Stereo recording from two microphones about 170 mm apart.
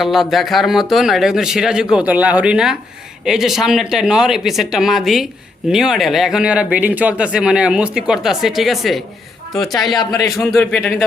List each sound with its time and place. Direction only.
0.0 s speech: centre (ahead or behind)
10.0 s speech: 20° left (ahead or behind)
10.5 s speech: 5° left (ahead or behind)